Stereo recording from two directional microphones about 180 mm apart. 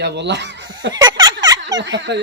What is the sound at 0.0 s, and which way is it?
Speech, 70° right (ahead or behind).